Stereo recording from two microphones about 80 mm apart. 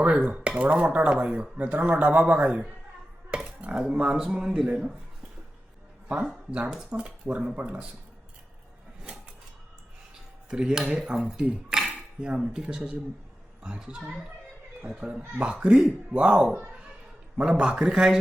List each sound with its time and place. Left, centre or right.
0.0 s dishes: centre
6.5 s dishes: centre
10.5 s speech: centre
12.6 s dishes: centre
16.5 s speech: right
17.3 s dishes: centre